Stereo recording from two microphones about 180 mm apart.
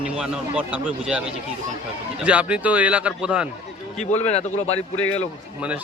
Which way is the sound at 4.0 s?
40° left (ahead or behind).